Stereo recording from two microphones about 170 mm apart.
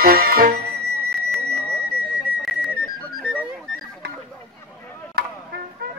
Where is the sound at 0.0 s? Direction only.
60° right (ahead or behind).